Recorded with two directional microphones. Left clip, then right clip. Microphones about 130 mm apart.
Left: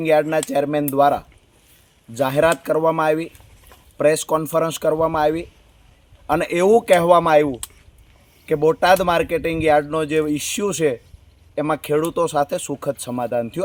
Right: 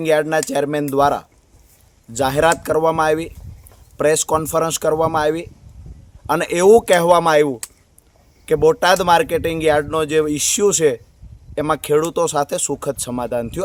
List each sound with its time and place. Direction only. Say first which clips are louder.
0.0 s speech: right 1 dB; 35° right (ahead or behind)
8.9 s speech: right 2 dB; 35° right (ahead or behind)